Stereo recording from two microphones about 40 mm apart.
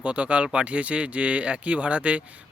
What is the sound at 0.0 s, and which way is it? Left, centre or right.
A man's voice, right.